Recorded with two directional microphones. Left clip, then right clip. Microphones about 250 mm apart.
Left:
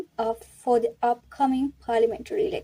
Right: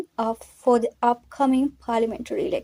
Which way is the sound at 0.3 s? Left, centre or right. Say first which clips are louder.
Right 4 dB; centre.